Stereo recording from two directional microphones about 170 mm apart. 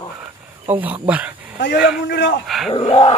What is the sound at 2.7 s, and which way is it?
Dog, 30° left (ahead or behind).